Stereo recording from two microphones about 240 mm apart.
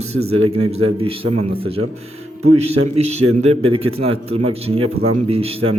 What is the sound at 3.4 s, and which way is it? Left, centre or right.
Speech, right.